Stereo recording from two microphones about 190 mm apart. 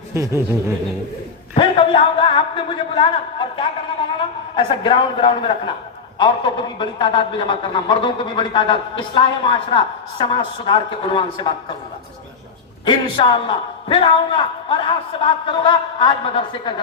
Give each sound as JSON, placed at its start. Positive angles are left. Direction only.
{"t": 0.1, "sound": "a sound", "side_deg": -15}
{"t": 1.5, "sound": "a man's voice", "side_deg": 30}
{"t": 12.8, "sound": "a man's voice", "side_deg": 25}